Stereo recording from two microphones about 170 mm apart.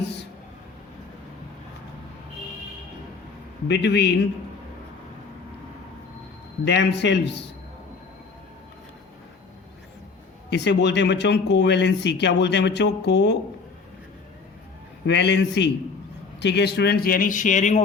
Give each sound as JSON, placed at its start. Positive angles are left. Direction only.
{"t": 3.7, "sound": "speech", "side_deg": 90}
{"t": 6.7, "sound": "speech", "side_deg": 90}
{"t": 10.5, "sound": "speech", "side_deg": 90}
{"t": 15.0, "sound": "speech", "side_deg": 90}